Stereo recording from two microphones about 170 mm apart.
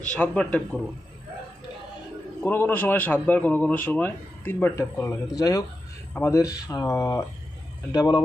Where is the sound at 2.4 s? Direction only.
10° left (ahead or behind).